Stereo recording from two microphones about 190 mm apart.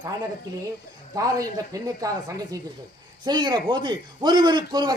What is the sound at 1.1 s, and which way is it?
Speech, 20° right (ahead or behind).